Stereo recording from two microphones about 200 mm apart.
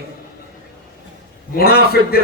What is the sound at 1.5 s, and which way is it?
Speech, 50° left (ahead or behind).